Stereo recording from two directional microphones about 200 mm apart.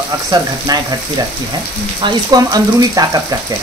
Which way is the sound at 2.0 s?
20° right (ahead or behind).